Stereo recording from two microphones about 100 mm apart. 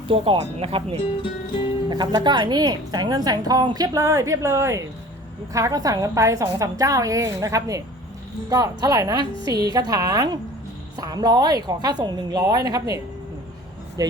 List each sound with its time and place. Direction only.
0.1 s speech: 75° right (ahead or behind)
1.0 s speech: 60° left (ahead or behind)
1.9 s a woman's voice: 45° right (ahead or behind)
14.0 s speech: 40° right (ahead or behind)